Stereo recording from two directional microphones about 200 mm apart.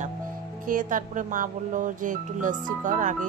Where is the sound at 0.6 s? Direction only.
40° right (ahead or behind).